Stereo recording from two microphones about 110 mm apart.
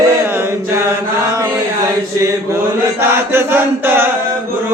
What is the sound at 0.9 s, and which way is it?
Chant, 30° right (ahead or behind).